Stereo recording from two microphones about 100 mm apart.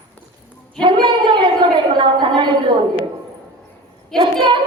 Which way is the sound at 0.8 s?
55° right (ahead or behind).